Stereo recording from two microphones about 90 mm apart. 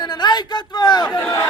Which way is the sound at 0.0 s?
50° left (ahead or behind).